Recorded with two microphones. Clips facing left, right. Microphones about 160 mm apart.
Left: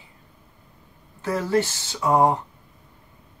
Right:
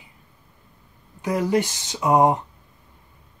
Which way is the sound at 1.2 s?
15° right (ahead or behind).